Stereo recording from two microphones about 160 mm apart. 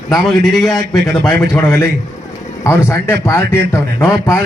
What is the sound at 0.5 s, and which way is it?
Speech, centre (ahead or behind).